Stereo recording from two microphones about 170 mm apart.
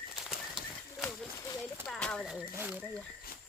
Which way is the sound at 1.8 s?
5° left (ahead or behind).